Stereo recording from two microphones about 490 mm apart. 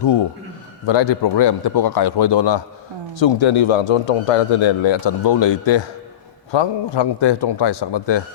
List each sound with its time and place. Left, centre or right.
0.0 s a man's voice: left